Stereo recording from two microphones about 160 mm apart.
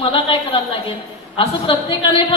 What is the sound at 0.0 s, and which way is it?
Speech, 35° left (ahead or behind).